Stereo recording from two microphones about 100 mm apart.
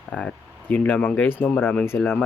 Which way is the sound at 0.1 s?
10° left (ahead or behind).